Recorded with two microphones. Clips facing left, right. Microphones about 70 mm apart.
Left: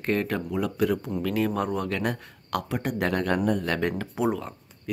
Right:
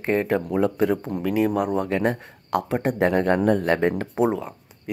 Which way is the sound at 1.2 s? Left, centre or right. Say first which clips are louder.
Right 6 dB; centre.